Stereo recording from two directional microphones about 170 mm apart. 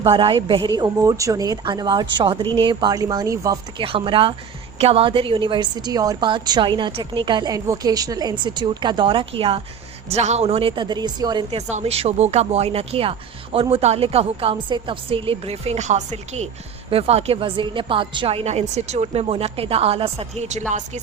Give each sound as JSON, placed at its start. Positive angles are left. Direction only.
{"t": 0.0, "sound": "a woman's voice", "side_deg": -30}
{"t": 3.8, "sound": "a woman's voice", "side_deg": -30}
{"t": 11.5, "sound": "speech", "side_deg": -40}